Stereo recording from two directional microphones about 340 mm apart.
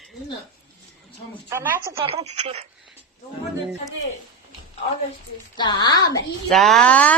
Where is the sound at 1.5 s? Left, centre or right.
Centre.